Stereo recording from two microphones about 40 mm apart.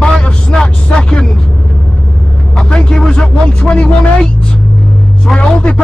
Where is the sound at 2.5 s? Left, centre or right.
Centre.